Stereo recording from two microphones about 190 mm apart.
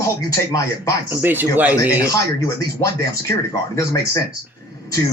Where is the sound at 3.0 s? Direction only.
20° left (ahead or behind).